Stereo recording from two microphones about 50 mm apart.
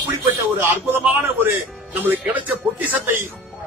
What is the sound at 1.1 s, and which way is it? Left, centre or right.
A man's voice, right.